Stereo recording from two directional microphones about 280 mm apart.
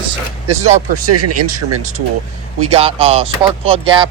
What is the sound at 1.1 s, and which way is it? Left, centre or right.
Speech, right.